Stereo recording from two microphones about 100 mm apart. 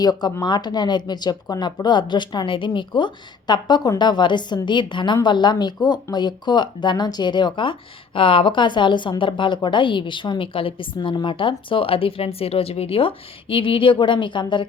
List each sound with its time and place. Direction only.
0.0 s a woman's voice: 40° left (ahead or behind); by 10.8 s 65° left (ahead or behind)
10.9 s a woman's voice: 50° left (ahead or behind)